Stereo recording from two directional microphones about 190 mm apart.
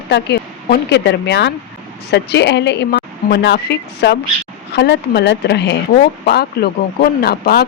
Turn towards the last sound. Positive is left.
turn(degrees=55)  # may be behind; listen again after turning